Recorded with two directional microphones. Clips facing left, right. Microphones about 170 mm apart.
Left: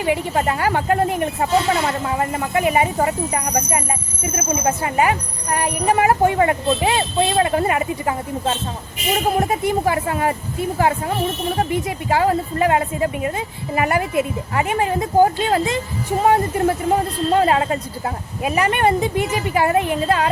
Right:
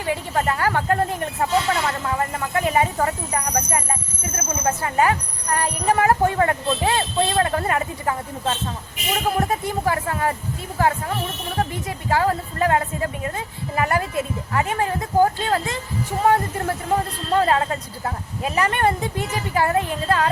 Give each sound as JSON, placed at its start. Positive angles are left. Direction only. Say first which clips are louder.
{"t": 0.0, "sound": "speech", "louder": "left 4 dB", "side_deg": 15}